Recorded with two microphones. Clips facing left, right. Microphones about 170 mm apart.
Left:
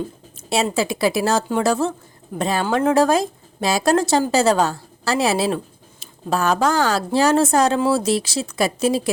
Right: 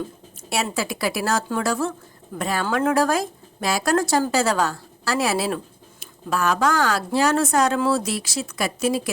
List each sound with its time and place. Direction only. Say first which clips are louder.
0.5 s speech: left 5 dB; 25° left (ahead or behind)